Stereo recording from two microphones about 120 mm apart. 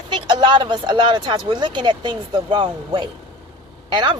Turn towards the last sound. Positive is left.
turn(degrees=-40)  # may be behind; listen again after turning